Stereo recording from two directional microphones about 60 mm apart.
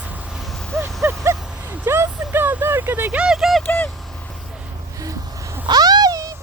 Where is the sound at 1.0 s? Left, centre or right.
Right.